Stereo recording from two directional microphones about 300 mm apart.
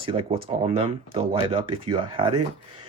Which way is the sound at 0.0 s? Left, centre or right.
Centre.